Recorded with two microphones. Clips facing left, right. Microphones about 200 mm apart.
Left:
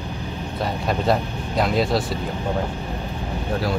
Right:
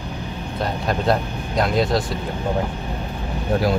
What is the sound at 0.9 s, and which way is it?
Speech, centre (ahead or behind).